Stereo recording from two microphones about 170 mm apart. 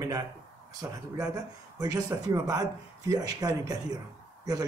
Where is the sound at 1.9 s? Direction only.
20° right (ahead or behind).